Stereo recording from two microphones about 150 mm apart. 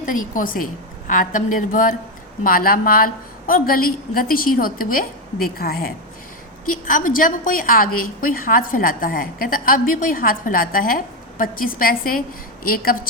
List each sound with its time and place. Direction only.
0.0 s a woman's voice: 65° left (ahead or behind)
2.4 s a woman's voice: 75° left (ahead or behind)
6.8 s a woman's voice: 65° left (ahead or behind)